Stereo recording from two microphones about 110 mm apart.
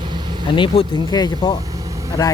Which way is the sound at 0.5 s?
45° left (ahead or behind).